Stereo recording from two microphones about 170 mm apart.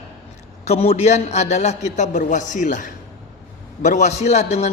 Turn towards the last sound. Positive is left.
turn(degrees=40)  # may be behind; listen again after turning